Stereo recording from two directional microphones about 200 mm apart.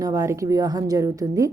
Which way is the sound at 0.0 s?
15° right (ahead or behind).